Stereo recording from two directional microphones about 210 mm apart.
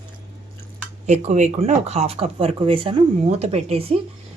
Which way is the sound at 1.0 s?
35° right (ahead or behind).